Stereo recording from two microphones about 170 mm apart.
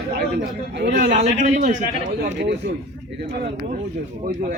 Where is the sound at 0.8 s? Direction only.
75° right (ahead or behind).